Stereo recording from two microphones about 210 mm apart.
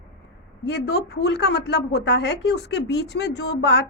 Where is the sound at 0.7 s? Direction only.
50° left (ahead or behind).